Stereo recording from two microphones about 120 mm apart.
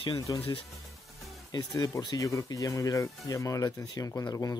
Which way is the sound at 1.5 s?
30° left (ahead or behind).